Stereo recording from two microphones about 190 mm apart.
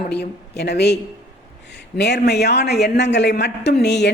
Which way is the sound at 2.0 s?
60° left (ahead or behind).